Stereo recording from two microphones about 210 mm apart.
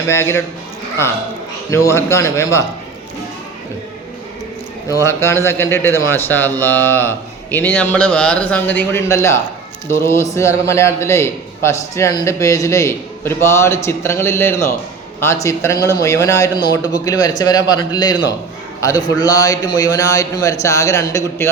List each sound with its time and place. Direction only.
0.1 s a man's voice: 10° left (ahead or behind)
1.7 s a man's voice: 15° left (ahead or behind)
5.0 s a man's voice: 15° left (ahead or behind)